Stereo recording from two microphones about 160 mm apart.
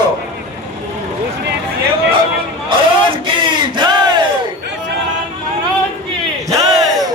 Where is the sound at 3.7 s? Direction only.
30° right (ahead or behind).